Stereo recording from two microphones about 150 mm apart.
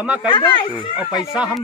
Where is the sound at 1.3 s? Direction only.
5° right (ahead or behind).